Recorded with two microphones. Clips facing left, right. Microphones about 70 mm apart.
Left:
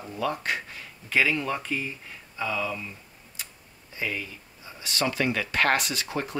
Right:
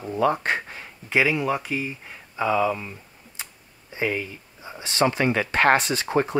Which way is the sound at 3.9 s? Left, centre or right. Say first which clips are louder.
Right 6 dB; right.